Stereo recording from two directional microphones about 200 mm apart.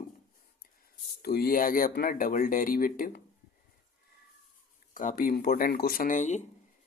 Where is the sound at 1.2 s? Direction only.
50° left (ahead or behind).